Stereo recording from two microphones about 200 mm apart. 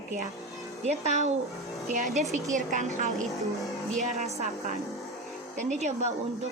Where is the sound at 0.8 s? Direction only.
35° right (ahead or behind).